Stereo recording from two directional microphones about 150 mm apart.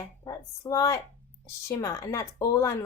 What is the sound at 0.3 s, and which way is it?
Speech, 25° left (ahead or behind).